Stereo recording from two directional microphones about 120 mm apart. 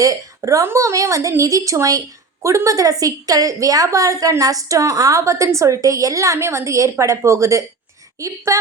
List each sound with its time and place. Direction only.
0.0 s a woman's voice: 25° right (ahead or behind)